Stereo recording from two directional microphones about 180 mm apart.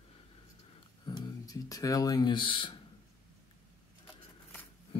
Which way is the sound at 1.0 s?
20° left (ahead or behind).